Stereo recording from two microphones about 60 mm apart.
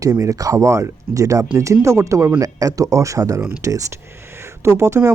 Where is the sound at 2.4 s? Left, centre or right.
Right.